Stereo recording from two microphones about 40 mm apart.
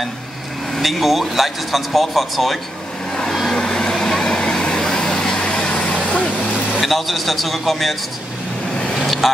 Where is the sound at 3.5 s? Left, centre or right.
Centre.